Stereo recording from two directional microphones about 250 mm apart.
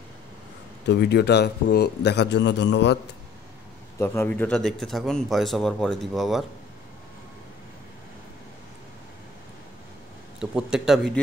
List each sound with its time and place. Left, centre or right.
0.8 s a man's voice: left
4.0 s speech: centre
10.4 s speech: centre